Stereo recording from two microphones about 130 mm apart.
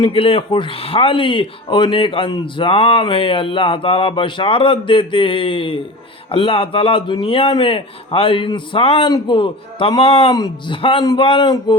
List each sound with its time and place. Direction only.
0.0 s speech: 45° left (ahead or behind)
9.0 s speech: 35° left (ahead or behind)
10.3 s speech: 30° left (ahead or behind)
10.8 s speech: 45° left (ahead or behind)